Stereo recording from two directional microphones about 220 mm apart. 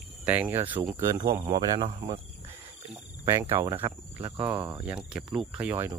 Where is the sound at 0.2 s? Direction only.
5° right (ahead or behind).